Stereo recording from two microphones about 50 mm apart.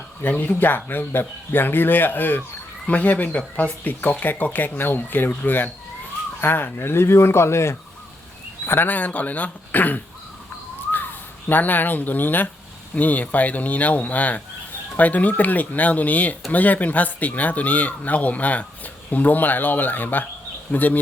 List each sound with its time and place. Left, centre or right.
0.2 s speech: left
2.8 s speech: left
8.6 s speech: left